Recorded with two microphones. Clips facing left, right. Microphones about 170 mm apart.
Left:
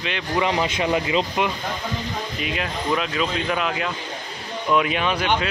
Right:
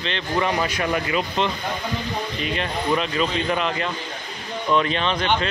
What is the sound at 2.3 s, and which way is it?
Speech, 5° left (ahead or behind).